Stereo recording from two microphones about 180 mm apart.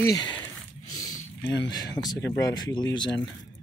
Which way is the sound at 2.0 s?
20° left (ahead or behind).